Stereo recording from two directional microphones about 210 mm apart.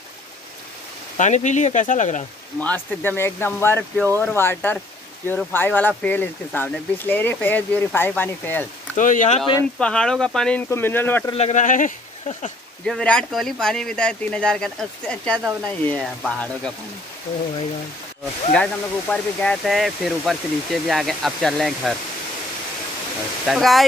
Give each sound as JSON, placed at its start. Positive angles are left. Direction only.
{"t": 1.1, "sound": "speech", "side_deg": 35}
{"t": 2.6, "sound": "speech", "side_deg": 10}
{"t": 8.9, "sound": "speech", "side_deg": 35}
{"t": 9.4, "sound": "speech", "side_deg": 5}
{"t": 11.3, "sound": "speech", "side_deg": 35}
{"t": 12.8, "sound": "speech", "side_deg": 5}
{"t": 18.5, "sound": "speech", "side_deg": 5}
{"t": 23.4, "sound": "speech", "side_deg": 0}